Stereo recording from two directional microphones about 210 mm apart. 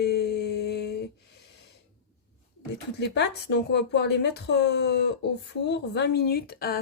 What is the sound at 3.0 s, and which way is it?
Speech, 50° left (ahead or behind).